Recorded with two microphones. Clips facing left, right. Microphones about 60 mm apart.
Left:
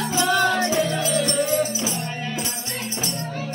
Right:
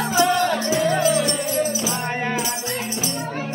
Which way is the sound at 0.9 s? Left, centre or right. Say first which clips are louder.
Right 6 dB; right.